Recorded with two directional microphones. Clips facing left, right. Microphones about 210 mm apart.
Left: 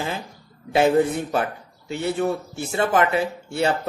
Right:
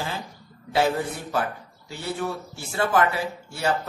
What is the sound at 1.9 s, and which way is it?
A man's voice, 25° left (ahead or behind).